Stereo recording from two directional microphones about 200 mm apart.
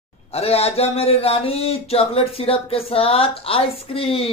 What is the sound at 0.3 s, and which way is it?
Speech, 30° left (ahead or behind).